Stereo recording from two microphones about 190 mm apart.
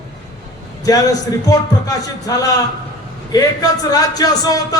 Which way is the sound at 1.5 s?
20° left (ahead or behind).